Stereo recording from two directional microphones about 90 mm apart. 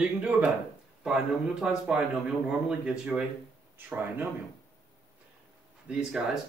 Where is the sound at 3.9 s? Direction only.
20° right (ahead or behind).